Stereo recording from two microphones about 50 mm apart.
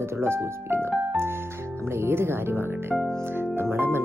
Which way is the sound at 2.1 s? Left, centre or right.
Right.